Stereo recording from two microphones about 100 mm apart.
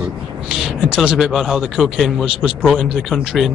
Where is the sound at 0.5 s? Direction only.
5° right (ahead or behind).